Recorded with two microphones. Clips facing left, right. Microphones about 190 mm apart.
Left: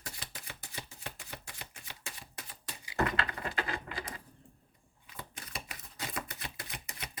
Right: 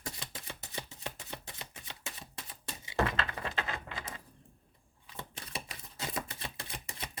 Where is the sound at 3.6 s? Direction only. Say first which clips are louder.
Left 1 dB; 25° right (ahead or behind).